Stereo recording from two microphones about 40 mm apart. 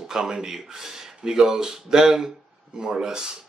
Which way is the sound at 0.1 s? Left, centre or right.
Centre.